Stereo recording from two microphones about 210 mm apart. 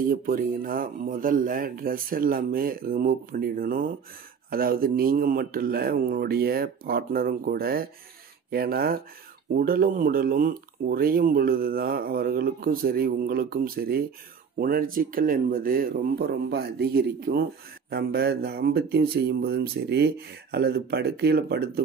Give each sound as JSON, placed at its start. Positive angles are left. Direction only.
{"t": 0.0, "sound": "speech", "side_deg": -40}